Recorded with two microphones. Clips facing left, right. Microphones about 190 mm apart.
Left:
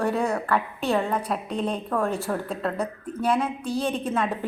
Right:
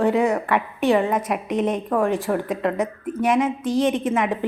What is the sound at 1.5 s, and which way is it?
Speech, 90° right.